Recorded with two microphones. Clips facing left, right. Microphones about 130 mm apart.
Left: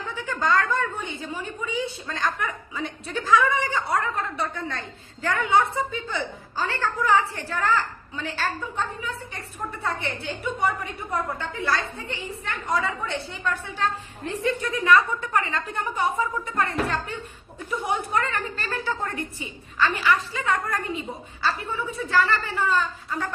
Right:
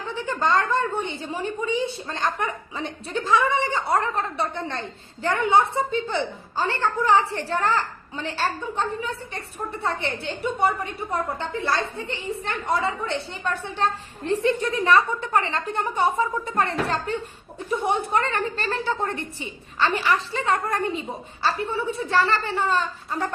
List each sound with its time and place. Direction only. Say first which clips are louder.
0.3 s a woman's voice: right 1 dB; 25° right (ahead or behind)
17.8 s a woman's voice: right 2 dB; 25° right (ahead or behind)